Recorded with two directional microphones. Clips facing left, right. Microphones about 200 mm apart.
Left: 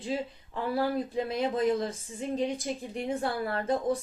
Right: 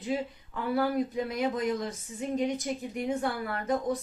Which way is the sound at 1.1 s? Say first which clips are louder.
Left 1 dB; 30° left (ahead or behind).